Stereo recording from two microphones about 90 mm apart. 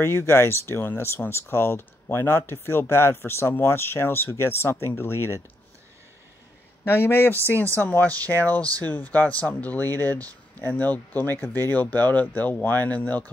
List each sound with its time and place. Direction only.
0.0 s speech: 30° left (ahead or behind)
6.8 s speech: 25° left (ahead or behind)